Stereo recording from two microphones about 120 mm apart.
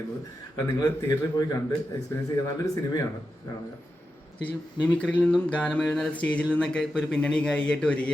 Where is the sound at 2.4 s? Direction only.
30° left (ahead or behind).